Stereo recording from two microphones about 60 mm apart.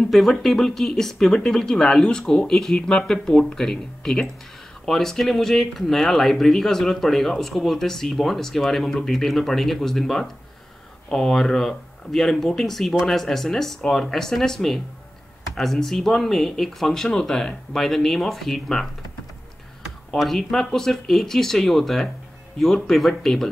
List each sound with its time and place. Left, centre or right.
0.1 s speech: centre
20.2 s speech: centre